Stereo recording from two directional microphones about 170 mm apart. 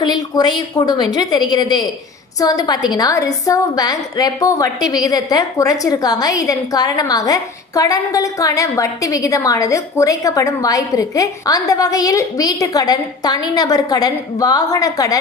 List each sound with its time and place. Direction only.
0.0 s a woman's voice: 25° left (ahead or behind)